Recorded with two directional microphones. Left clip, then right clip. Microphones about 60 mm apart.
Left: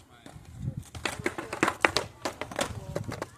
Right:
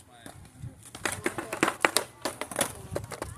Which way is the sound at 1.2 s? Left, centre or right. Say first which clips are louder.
Even; left.